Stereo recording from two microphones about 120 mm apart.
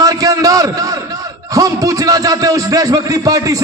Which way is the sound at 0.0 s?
30° right (ahead or behind).